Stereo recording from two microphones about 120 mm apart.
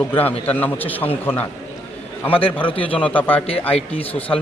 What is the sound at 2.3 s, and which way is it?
Speech, 50° left (ahead or behind).